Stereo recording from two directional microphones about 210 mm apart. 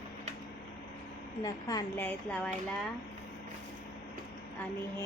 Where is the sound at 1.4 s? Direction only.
15° left (ahead or behind).